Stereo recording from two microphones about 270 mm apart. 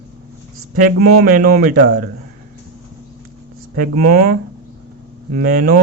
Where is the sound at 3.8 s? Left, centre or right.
Right.